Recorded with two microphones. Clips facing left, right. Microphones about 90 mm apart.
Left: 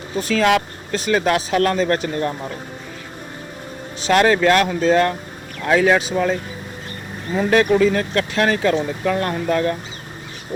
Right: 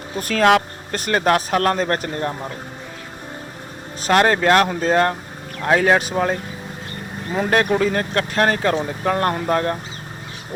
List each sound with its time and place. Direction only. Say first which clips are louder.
0.2 s speech: right 1 dB; 50° right (ahead or behind)
4.0 s speech: left 1 dB; 45° right (ahead or behind)
7.3 s speech: left 3 dB; 45° right (ahead or behind)